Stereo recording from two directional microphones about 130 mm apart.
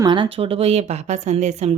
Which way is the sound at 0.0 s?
40° right (ahead or behind).